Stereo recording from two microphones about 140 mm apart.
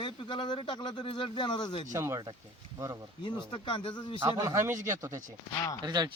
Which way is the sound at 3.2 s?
35° left (ahead or behind).